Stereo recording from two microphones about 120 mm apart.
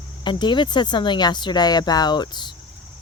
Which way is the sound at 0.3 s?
40° left (ahead or behind).